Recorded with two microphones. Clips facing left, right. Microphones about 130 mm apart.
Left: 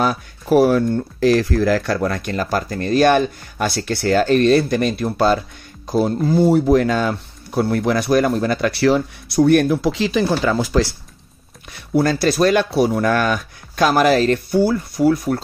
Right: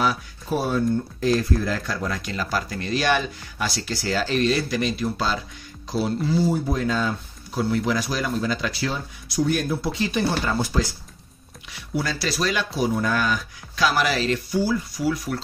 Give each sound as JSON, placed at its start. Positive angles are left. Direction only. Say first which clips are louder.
{"t": 0.5, "sound": "speech", "louder": "left 9 dB", "side_deg": 80}
{"t": 11.7, "sound": "speech", "louder": "left 10 dB", "side_deg": 50}